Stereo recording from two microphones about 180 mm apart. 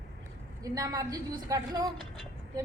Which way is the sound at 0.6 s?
20° right (ahead or behind).